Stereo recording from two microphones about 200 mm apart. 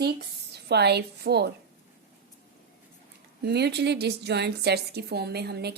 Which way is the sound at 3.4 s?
55° right (ahead or behind).